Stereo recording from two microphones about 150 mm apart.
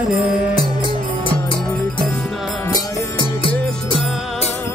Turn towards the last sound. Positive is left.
turn(degrees=35)  # may be behind; listen again after turning